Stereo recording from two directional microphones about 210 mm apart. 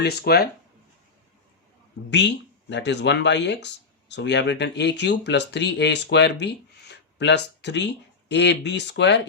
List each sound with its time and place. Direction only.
0.0 s speech: 50° left (ahead or behind)
2.0 s speech: 55° left (ahead or behind)